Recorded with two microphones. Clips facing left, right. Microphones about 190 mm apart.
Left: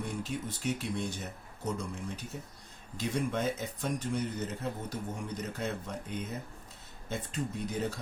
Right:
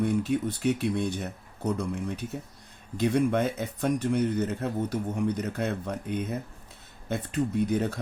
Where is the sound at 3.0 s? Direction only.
60° right (ahead or behind).